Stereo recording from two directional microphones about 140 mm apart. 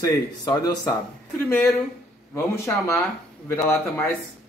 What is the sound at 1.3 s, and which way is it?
A man's voice, 15° left (ahead or behind).